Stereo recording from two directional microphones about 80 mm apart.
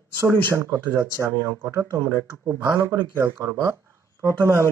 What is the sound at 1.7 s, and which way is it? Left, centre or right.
Speech, right.